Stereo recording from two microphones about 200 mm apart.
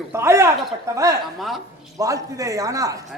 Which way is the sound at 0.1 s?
15° right (ahead or behind).